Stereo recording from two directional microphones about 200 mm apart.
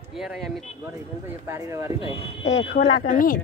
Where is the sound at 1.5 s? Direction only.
15° right (ahead or behind).